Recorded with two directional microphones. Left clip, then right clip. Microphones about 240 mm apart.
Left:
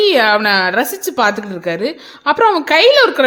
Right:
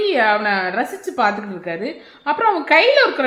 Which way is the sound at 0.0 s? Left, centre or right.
Left.